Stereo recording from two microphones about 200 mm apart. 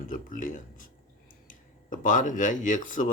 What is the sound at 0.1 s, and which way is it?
Speech, 45° left (ahead or behind).